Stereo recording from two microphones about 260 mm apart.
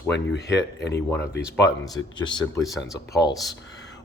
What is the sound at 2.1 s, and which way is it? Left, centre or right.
Speech, centre.